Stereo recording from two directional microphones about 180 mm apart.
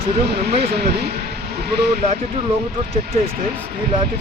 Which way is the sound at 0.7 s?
65° right (ahead or behind).